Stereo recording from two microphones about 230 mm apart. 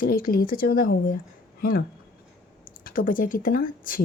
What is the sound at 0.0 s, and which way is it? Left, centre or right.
A woman's voice, left.